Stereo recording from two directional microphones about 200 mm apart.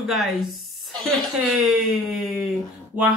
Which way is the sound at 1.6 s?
Centre (ahead or behind).